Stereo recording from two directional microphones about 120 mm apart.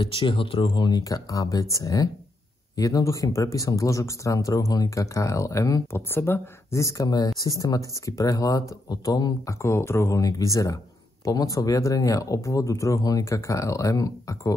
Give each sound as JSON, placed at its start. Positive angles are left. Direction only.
{"t": 0.0, "sound": "speech", "side_deg": 45}